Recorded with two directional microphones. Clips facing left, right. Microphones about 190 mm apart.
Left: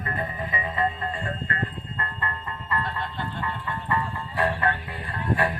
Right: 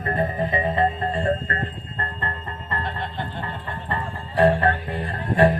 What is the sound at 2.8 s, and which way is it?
Music, 25° right (ahead or behind).